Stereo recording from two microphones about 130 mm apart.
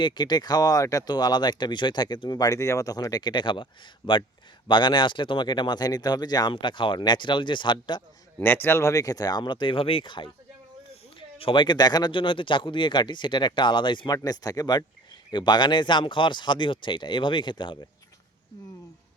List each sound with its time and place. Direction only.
0.0 s speech: 35° left (ahead or behind)
8.4 s speech: 15° left (ahead or behind); by 10.2 s 40° left (ahead or behind)
11.3 s speech: 40° left (ahead or behind)